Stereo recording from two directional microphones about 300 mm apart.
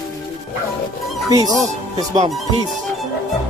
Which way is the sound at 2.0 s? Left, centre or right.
Right.